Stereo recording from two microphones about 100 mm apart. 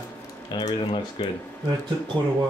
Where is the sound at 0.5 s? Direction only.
55° left (ahead or behind).